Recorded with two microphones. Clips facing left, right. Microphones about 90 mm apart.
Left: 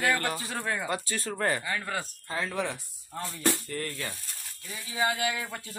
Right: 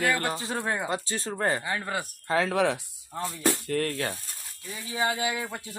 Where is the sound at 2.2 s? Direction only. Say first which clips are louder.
Right 9 dB; 75° right (ahead or behind).